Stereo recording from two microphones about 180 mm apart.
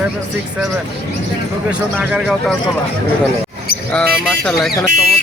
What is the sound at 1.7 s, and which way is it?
Speech, 5° right (ahead or behind).